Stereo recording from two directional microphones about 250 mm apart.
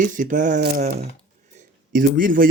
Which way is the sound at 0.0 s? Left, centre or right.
Right.